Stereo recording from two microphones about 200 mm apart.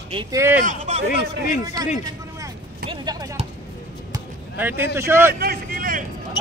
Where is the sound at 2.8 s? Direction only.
20° right (ahead or behind).